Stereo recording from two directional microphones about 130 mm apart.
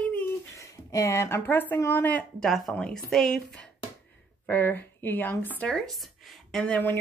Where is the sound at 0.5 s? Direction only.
25° left (ahead or behind); by 3.7 s 5° left (ahead or behind).